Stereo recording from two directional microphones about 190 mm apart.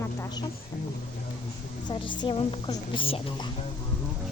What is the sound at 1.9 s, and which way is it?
A woman's voice, 25° left (ahead or behind).